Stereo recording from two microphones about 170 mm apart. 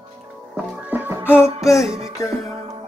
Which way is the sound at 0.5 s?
5° right (ahead or behind).